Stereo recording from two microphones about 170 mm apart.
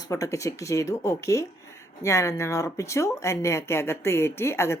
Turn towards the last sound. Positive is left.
turn(degrees=15)  # may be behind; listen again after turning